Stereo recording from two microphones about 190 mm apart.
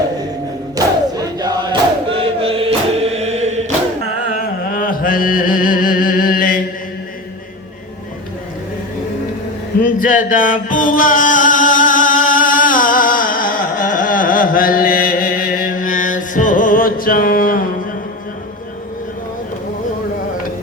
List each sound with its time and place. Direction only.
0.8 s chant: 20° right (ahead or behind); by 3.7 s 35° right (ahead or behind)
4.4 s mantra: 50° left (ahead or behind)
9.8 s music: 45° left (ahead or behind)